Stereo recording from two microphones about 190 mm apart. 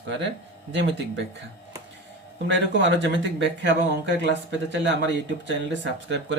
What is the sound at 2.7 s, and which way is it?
Speech, 70° right (ahead or behind).